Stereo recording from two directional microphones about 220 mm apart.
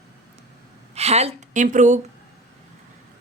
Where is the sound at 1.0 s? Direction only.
30° right (ahead or behind).